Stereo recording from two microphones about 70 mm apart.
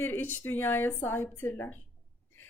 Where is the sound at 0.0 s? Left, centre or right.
Left.